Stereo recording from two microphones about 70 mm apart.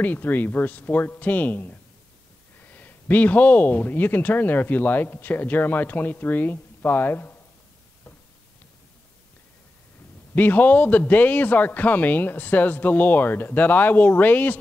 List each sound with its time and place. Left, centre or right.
0.0 s speech: left
10.3 s speech: left